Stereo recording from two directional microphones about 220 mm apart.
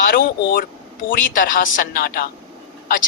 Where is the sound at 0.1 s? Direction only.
40° left (ahead or behind).